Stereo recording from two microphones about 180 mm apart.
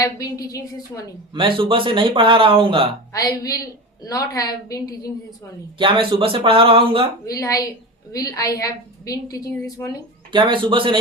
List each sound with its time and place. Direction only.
0.0 s a woman's voice: 20° left (ahead or behind)
1.3 s speech: 30° right (ahead or behind)
3.1 s a woman's voice: 20° left (ahead or behind)
5.8 s speech: 30° right (ahead or behind)
7.3 s a woman's voice: 20° left (ahead or behind)
10.3 s speech: 25° right (ahead or behind)